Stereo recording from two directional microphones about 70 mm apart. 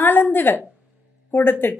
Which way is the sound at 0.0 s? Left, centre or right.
Left.